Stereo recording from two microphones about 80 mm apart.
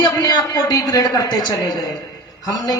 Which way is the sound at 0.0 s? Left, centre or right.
Left.